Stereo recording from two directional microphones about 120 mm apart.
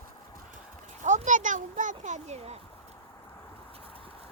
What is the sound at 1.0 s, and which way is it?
Speech, 90° right.